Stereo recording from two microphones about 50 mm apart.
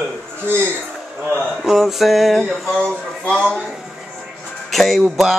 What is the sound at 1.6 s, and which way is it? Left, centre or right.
Music, centre.